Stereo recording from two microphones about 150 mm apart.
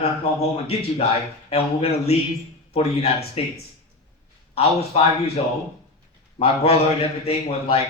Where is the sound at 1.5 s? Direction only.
45° left (ahead or behind).